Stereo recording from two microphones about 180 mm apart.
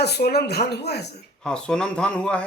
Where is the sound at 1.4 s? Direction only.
5° left (ahead or behind).